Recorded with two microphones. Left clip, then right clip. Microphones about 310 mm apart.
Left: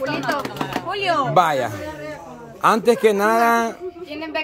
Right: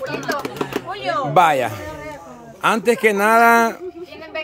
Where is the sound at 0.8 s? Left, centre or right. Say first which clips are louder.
Left 4 dB; left.